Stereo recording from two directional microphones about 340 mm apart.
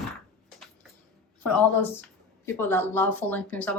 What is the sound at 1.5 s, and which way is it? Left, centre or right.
Speech, centre.